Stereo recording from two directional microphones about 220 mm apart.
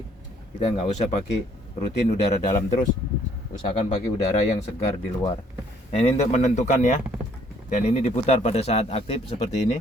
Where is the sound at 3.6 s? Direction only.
25° left (ahead or behind).